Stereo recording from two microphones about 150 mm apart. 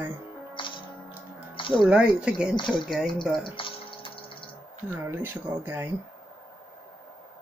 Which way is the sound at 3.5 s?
35° left (ahead or behind).